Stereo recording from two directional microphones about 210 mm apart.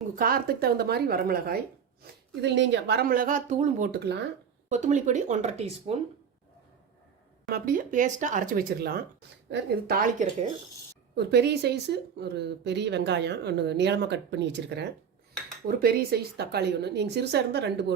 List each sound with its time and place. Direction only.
0.2 s speech: 45° right (ahead or behind)
2.4 s speech: 55° right (ahead or behind)
4.7 s speech: 35° right (ahead or behind)
7.5 s speech: 40° right (ahead or behind)
11.1 s speech: 50° right (ahead or behind)